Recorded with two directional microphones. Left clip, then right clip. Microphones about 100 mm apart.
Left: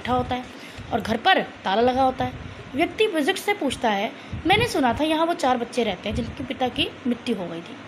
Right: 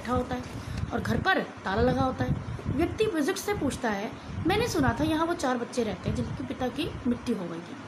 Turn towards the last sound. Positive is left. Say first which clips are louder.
# left 4 dB
turn(degrees=30)  # may be behind; listen again after turning